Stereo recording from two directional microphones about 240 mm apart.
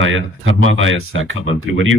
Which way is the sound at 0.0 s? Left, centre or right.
Right.